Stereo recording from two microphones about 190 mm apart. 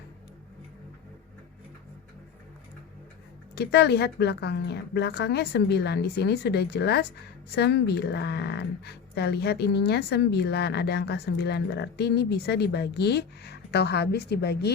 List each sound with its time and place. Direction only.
3.5 s speech: 60° left (ahead or behind)